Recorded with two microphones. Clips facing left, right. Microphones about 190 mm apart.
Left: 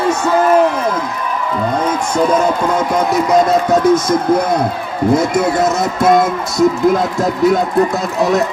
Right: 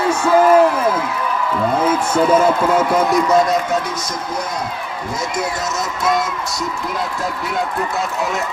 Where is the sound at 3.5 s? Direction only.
40° left (ahead or behind).